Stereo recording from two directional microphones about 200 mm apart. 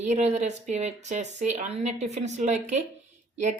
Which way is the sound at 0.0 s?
35° right (ahead or behind).